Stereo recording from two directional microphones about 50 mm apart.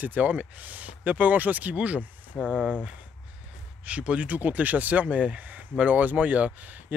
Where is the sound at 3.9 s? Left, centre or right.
Right.